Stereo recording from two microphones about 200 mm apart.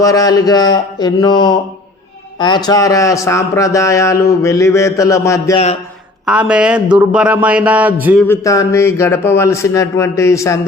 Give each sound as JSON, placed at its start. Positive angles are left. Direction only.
{"t": 0.0, "sound": "a sound", "side_deg": 15}
{"t": 2.4, "sound": "speech", "side_deg": 20}
{"t": 6.2, "sound": "a man's voice", "side_deg": -5}
{"t": 8.3, "sound": "speech", "side_deg": 15}